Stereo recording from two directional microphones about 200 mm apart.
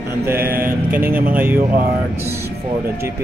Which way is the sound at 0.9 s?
10° right (ahead or behind).